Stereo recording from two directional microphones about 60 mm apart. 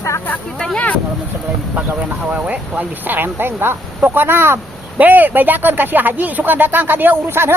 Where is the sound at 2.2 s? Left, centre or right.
Right.